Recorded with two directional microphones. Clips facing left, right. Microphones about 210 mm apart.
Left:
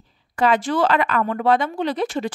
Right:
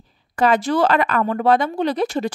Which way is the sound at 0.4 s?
40° right (ahead or behind).